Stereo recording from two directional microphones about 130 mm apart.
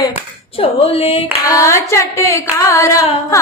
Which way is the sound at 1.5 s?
20° left (ahead or behind).